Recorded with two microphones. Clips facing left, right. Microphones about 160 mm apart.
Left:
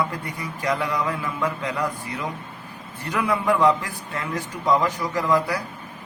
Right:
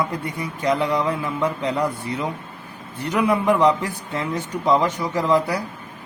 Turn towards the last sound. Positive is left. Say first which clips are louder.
# right 2 dB
turn(degrees=-20)  # may be behind; listen again after turning